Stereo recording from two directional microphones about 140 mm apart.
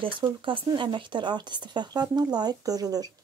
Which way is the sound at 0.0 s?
35° right (ahead or behind).